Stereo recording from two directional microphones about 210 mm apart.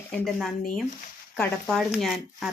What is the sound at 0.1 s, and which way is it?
Speech, centre (ahead or behind).